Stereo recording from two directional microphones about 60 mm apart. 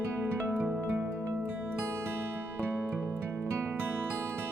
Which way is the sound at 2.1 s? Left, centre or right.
Right.